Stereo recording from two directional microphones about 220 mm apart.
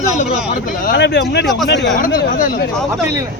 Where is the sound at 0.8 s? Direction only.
45° left (ahead or behind).